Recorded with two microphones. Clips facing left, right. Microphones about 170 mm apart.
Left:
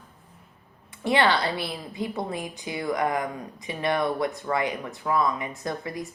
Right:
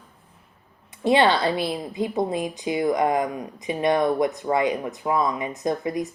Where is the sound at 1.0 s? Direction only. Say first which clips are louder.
Right 4 dB; 20° right (ahead or behind).